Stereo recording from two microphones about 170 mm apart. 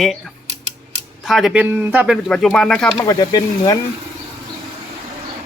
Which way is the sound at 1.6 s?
10° right (ahead or behind).